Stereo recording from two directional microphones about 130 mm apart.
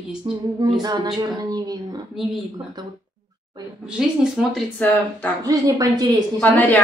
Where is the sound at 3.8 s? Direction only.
5° right (ahead or behind).